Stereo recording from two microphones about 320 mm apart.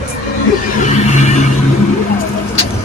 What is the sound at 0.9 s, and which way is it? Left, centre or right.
Vehicle, left.